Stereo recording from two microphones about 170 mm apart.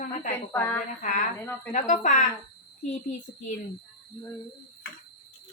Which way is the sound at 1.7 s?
50° left (ahead or behind).